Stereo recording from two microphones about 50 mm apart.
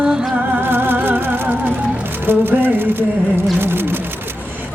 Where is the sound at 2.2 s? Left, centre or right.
Right.